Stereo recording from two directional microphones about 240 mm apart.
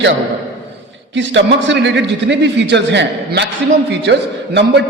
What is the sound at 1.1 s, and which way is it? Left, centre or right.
A man's voice, right.